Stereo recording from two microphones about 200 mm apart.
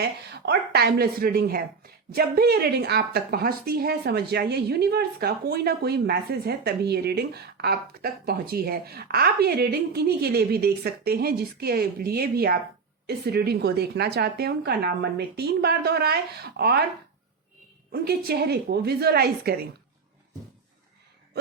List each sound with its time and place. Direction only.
0.0 s speech: 55° right (ahead or behind)
17.9 s speech: 50° right (ahead or behind)